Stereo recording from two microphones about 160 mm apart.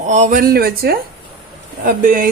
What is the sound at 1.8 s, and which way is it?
Speech, 55° right (ahead or behind).